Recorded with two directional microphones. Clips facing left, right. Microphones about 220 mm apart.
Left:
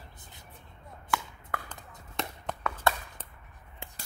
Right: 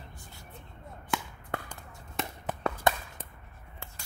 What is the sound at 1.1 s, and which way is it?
Chop, 20° right (ahead or behind).